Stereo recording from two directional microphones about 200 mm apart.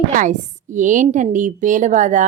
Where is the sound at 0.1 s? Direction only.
40° right (ahead or behind).